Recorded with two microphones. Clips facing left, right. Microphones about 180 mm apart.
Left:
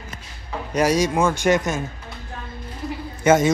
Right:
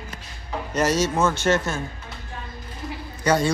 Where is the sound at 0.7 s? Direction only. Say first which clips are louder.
Left 3 dB; 10° left (ahead or behind).